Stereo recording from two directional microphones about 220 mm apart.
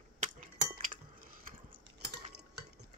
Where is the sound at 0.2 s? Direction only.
35° right (ahead or behind).